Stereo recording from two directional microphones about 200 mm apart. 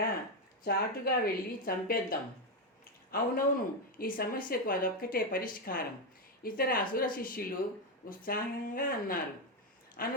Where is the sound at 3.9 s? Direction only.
45° left (ahead or behind).